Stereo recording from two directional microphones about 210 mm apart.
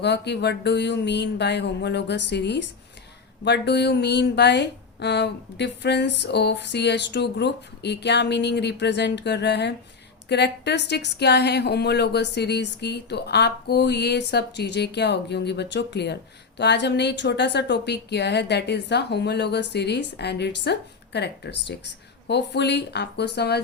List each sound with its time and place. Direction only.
0.0 s speech: 55° left (ahead or behind)